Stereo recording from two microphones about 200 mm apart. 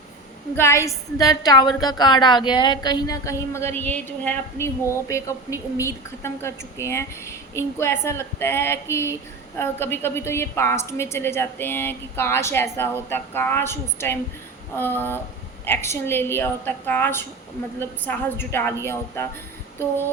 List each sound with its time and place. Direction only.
0.5 s speech: 15° left (ahead or behind)